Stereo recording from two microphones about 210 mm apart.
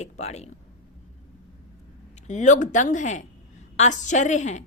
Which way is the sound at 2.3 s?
35° left (ahead or behind).